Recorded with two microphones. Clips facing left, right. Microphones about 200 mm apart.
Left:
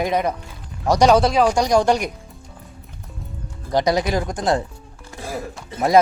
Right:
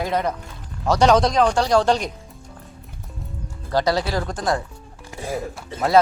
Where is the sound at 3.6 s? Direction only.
15° left (ahead or behind).